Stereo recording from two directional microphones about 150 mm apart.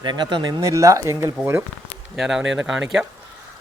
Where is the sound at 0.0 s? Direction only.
30° right (ahead or behind).